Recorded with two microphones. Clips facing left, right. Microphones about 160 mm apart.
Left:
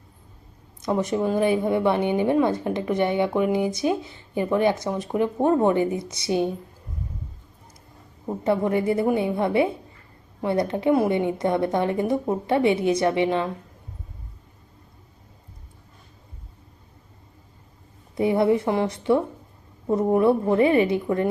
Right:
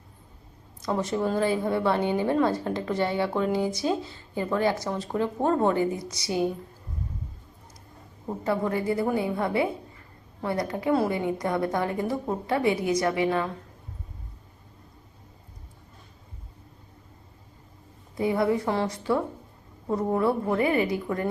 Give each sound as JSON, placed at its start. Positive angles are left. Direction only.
{"t": 0.8, "sound": "a woman's voice", "side_deg": 15}
{"t": 8.4, "sound": "a woman's voice", "side_deg": 20}
{"t": 18.2, "sound": "a woman's voice", "side_deg": 25}